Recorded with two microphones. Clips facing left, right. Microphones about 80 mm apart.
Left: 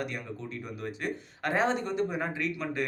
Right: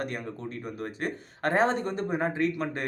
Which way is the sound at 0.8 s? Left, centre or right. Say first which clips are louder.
Right 1 dB; right.